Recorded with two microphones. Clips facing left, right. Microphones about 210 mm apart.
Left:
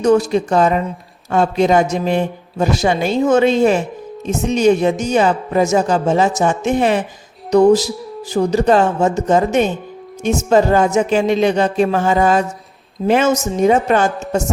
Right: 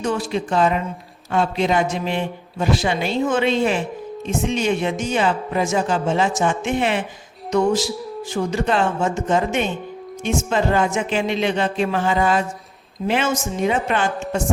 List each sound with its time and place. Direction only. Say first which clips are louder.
0.0 s a man's voice: left 9 dB; 40° left (ahead or behind)